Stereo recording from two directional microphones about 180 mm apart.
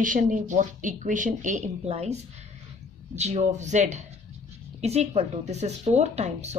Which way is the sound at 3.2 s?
40° right (ahead or behind).